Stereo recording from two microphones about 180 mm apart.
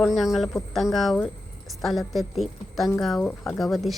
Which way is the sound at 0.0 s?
Centre (ahead or behind).